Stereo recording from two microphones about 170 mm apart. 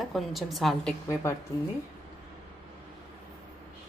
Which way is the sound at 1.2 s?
15° left (ahead or behind).